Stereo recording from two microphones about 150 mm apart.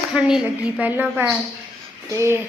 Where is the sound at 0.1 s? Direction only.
5° right (ahead or behind).